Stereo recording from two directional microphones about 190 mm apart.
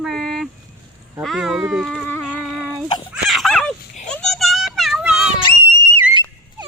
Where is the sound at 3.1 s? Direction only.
Centre (ahead or behind).